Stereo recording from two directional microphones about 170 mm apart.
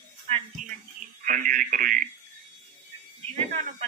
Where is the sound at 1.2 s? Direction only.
50° right (ahead or behind).